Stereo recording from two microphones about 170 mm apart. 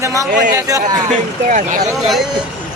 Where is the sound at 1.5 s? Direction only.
50° right (ahead or behind).